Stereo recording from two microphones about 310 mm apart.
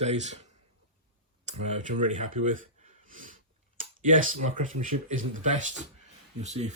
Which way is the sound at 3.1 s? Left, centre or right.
Right.